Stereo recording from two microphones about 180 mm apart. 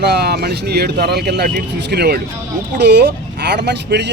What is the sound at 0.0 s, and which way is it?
Speech, 65° right (ahead or behind).